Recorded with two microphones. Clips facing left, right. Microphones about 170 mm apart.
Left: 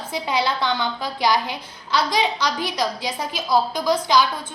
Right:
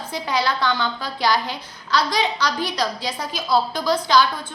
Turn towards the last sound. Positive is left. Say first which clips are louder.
# even
turn(degrees=15)  # may be behind; listen again after turning